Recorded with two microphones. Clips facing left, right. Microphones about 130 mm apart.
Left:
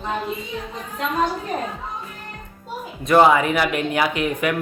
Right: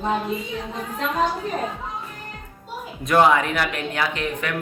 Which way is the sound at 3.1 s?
5° left (ahead or behind).